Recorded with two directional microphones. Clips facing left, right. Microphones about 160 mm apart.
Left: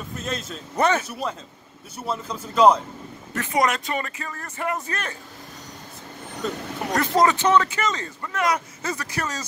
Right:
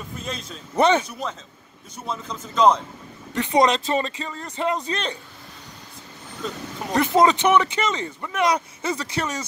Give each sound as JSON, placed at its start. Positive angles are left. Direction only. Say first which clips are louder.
{"t": 0.2, "sound": "a man's voice", "louder": "left 3 dB", "side_deg": 5}
{"t": 0.7, "sound": "speech", "louder": "right 3 dB", "side_deg": -25}
{"t": 1.0, "sound": "speech", "louder": "left 2 dB", "side_deg": 5}
{"t": 3.4, "sound": "speech", "louder": "right 4 dB", "side_deg": -20}
{"t": 6.4, "sound": "a man's voice", "louder": "left 3 dB", "side_deg": 0}
{"t": 6.9, "sound": "a man's voice", "louder": "right 2 dB", "side_deg": -15}